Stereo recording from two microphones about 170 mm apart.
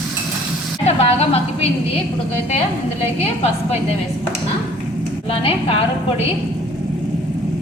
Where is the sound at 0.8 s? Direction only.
35° left (ahead or behind).